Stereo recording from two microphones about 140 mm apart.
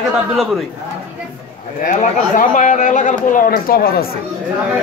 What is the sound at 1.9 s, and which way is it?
A man's voice, 70° left (ahead or behind).